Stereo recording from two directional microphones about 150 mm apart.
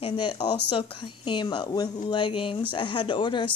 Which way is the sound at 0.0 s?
35° left (ahead or behind).